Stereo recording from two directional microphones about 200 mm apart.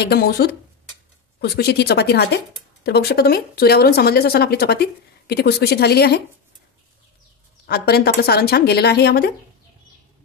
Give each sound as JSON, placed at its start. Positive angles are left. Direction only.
{"t": 0.0, "sound": "speech", "side_deg": 50}
{"t": 7.6, "sound": "speech", "side_deg": 50}